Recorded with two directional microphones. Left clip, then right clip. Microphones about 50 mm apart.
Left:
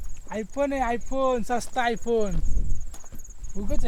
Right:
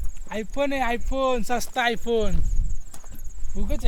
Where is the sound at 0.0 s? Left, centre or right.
Right.